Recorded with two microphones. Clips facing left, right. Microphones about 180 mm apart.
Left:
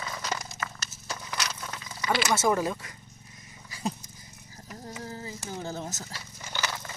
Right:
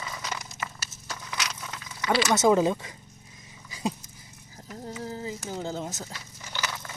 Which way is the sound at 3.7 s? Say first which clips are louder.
Right 2 dB; 15° right (ahead or behind).